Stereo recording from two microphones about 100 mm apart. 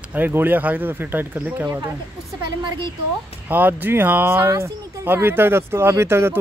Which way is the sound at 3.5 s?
20° right (ahead or behind).